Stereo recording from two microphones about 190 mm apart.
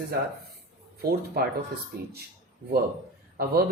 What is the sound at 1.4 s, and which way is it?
Speech, 55° right (ahead or behind).